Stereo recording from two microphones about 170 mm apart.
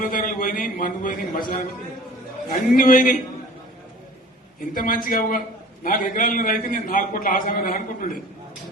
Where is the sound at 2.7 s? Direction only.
55° left (ahead or behind).